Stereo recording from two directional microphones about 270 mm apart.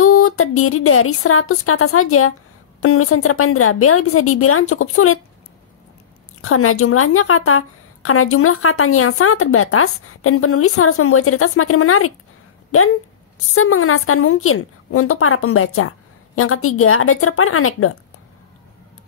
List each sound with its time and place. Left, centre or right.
0.0 s a woman's voice: left
6.4 s a woman's voice: left
13.6 s a woman's voice: left